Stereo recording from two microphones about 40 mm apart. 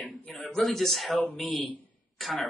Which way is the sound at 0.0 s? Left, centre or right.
Left.